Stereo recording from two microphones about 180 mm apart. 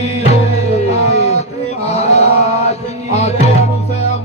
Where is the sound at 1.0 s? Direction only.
35° left (ahead or behind).